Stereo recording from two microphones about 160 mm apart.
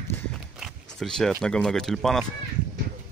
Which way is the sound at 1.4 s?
5° left (ahead or behind).